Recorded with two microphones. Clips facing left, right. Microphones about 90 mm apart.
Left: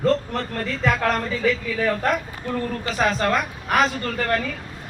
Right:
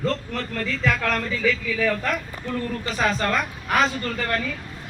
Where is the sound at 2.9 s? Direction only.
Centre (ahead or behind).